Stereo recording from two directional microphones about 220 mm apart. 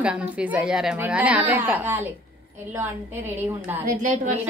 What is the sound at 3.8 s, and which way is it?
Speech, 35° right (ahead or behind).